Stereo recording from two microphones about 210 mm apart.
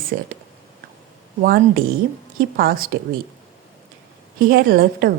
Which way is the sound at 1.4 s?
45° right (ahead or behind).